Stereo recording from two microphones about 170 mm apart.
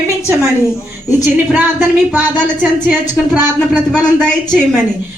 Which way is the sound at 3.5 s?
5° left (ahead or behind).